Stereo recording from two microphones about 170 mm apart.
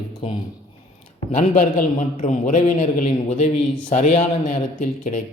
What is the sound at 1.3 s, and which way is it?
A man's voice, 50° left (ahead or behind).